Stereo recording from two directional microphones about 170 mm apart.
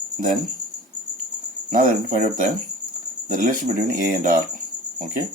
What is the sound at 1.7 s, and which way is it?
Speech, 50° right (ahead or behind).